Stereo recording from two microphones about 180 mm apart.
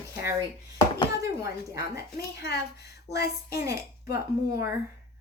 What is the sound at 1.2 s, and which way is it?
Speech, 15° right (ahead or behind).